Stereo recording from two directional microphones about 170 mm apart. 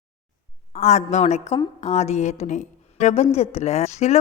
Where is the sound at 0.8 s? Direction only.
40° left (ahead or behind).